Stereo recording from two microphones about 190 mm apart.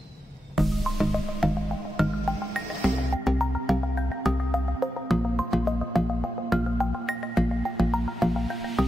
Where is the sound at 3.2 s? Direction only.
Centre (ahead or behind).